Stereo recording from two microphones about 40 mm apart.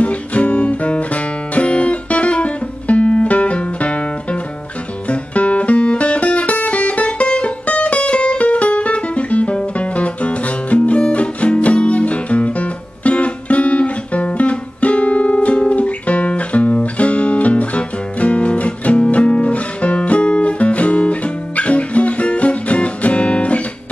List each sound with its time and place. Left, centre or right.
0.0 s music: left